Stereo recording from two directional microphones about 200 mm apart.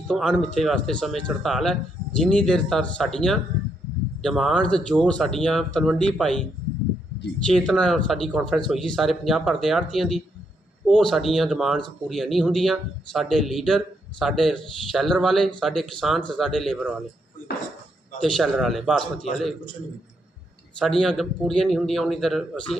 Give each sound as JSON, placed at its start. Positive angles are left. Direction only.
{"t": 0.1, "sound": "speech", "side_deg": 5}
{"t": 7.4, "sound": "speech", "side_deg": 5}
{"t": 18.2, "sound": "speech", "side_deg": 0}
{"t": 20.7, "sound": "speech", "side_deg": 0}